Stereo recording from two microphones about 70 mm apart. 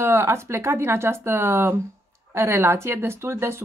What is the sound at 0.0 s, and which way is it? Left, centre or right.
A woman's voice, right.